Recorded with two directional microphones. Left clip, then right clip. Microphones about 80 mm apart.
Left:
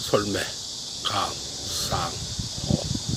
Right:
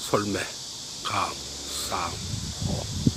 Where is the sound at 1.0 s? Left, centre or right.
Centre.